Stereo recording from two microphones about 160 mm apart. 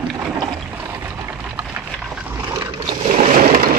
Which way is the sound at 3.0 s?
45° right (ahead or behind).